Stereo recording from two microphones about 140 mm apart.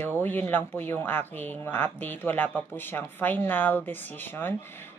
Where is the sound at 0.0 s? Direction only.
15° left (ahead or behind).